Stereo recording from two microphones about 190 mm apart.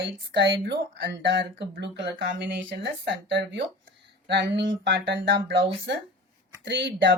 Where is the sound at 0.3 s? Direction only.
65° right (ahead or behind).